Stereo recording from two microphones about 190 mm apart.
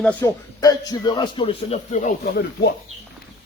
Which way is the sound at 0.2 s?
20° left (ahead or behind).